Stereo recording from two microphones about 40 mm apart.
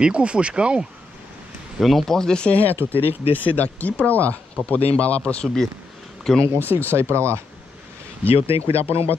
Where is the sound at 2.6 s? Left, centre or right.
Right.